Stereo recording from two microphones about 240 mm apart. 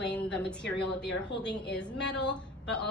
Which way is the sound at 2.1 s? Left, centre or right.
Left.